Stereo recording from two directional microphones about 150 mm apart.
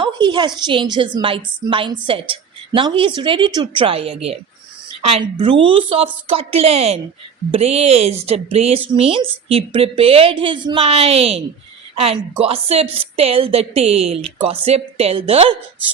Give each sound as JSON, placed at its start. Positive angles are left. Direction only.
{"t": 0.0, "sound": "a woman's voice", "side_deg": -30}